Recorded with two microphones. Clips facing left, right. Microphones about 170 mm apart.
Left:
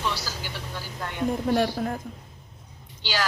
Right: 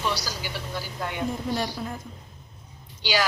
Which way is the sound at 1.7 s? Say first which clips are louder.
Left 5 dB; 55° left (ahead or behind).